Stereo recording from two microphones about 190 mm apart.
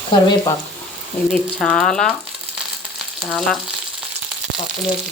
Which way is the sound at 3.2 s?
5° left (ahead or behind).